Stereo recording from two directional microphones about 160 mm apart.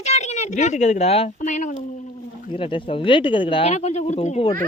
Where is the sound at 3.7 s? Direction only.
45° left (ahead or behind).